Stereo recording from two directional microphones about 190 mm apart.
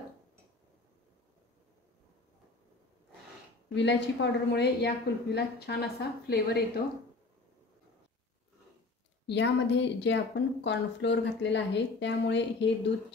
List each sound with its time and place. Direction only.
3.7 s a woman's voice: 70° left (ahead or behind)
9.3 s a woman's voice: 65° left (ahead or behind)